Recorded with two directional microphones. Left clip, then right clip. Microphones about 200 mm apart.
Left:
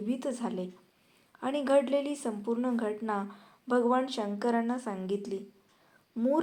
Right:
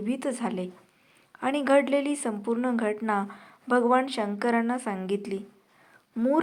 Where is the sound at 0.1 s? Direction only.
25° right (ahead or behind).